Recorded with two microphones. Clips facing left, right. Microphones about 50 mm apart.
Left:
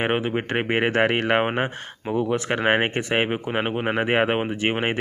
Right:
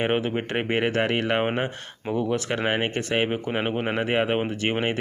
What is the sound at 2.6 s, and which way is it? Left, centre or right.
Speech, left.